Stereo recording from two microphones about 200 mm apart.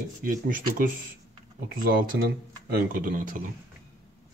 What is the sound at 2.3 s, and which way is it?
Speech, 50° right (ahead or behind).